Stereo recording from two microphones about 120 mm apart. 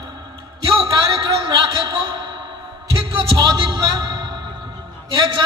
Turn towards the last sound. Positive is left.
turn(degrees=-45)  # may be behind; listen again after turning